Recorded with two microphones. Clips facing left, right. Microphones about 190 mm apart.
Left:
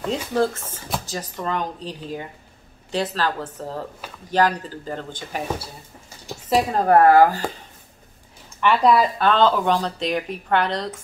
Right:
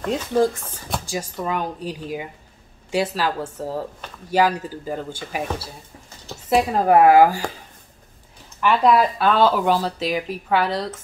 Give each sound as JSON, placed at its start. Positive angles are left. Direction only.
{"t": 0.3, "sound": "speech", "side_deg": -15}
{"t": 6.5, "sound": "speech", "side_deg": -5}
{"t": 8.5, "sound": "speech", "side_deg": -5}